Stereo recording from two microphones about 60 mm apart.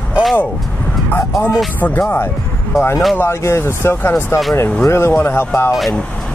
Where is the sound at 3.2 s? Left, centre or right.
Left.